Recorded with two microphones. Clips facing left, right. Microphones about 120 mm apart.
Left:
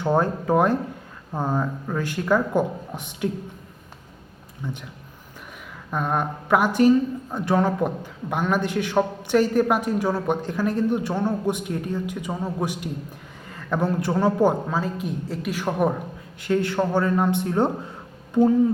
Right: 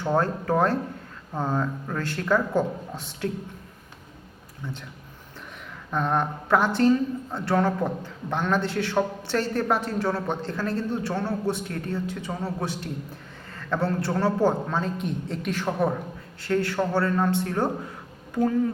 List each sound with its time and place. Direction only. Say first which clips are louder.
0.0 s a woman's voice: left 3 dB; 15° left (ahead or behind)
4.6 s a woman's voice: left 3 dB; 15° left (ahead or behind)
5.9 s a woman's voice: even; 10° left (ahead or behind)